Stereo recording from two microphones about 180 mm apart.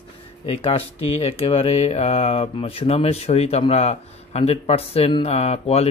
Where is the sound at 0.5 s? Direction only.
30° left (ahead or behind).